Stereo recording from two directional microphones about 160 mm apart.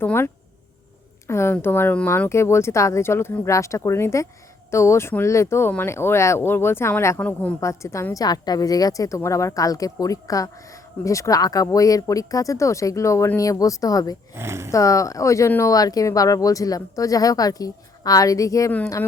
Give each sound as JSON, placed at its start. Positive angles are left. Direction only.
{"t": 0.0, "sound": "speech", "side_deg": 15}
{"t": 1.3, "sound": "a woman's voice", "side_deg": 15}
{"t": 14.3, "sound": "speech", "side_deg": -15}
{"t": 14.7, "sound": "a woman's voice", "side_deg": 20}